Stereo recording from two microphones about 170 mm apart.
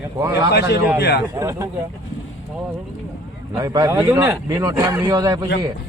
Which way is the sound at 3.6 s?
20° right (ahead or behind).